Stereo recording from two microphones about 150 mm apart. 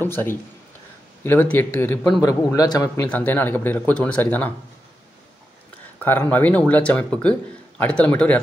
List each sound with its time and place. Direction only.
0.0 s a man's voice: 15° left (ahead or behind)
2.2 s speech: 25° left (ahead or behind)
3.1 s a man's voice: 10° left (ahead or behind)
5.9 s a sound: 15° left (ahead or behind)
6.3 s a man's voice: 10° left (ahead or behind)